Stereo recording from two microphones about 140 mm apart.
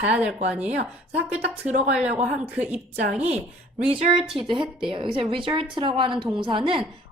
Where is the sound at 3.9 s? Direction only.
45° right (ahead or behind).